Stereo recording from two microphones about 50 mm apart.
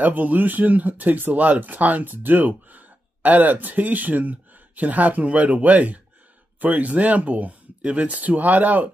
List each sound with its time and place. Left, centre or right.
0.0 s speech: right